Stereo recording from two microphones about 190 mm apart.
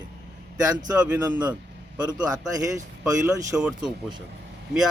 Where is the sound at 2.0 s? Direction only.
20° right (ahead or behind).